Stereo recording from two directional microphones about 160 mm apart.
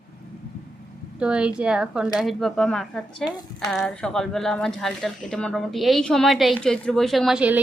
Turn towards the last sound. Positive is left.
turn(degrees=-5)  # may be behind; listen again after turning